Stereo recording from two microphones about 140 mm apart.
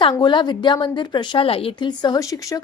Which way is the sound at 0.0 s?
30° left (ahead or behind).